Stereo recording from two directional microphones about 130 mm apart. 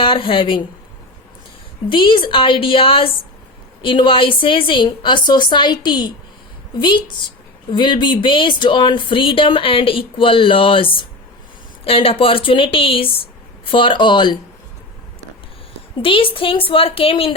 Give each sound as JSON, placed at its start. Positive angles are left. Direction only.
{"t": 0.0, "sound": "speech", "side_deg": 40}
{"t": 1.9, "sound": "a woman's voice", "side_deg": 40}
{"t": 16.0, "sound": "a woman's voice", "side_deg": 45}